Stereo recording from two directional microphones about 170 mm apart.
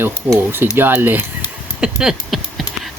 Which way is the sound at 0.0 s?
10° right (ahead or behind).